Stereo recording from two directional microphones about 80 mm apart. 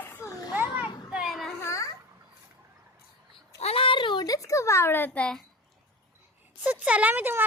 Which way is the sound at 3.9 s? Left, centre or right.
Left.